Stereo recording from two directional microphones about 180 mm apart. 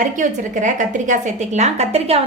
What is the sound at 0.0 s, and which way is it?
A woman's voice, 45° right (ahead or behind).